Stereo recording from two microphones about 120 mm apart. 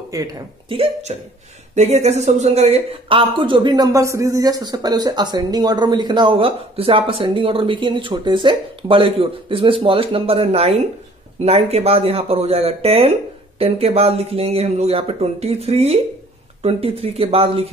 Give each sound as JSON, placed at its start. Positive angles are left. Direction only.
{"t": 0.1, "sound": "speech", "side_deg": -30}
{"t": 0.7, "sound": "speech", "side_deg": -55}
{"t": 1.8, "sound": "speech", "side_deg": -65}